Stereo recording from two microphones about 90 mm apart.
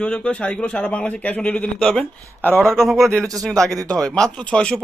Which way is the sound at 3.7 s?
40° right (ahead or behind).